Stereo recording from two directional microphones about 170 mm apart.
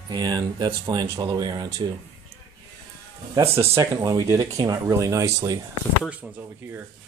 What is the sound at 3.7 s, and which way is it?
Speech, 15° right (ahead or behind).